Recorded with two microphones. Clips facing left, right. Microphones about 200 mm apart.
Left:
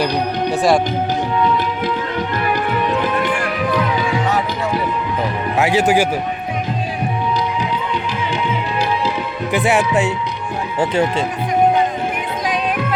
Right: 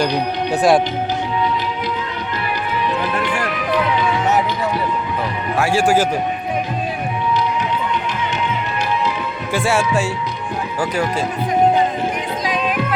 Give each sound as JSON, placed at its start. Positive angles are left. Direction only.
{"t": 0.5, "sound": "speech", "side_deg": 0}
{"t": 5.5, "sound": "speech", "side_deg": 20}
{"t": 9.5, "sound": "speech", "side_deg": 20}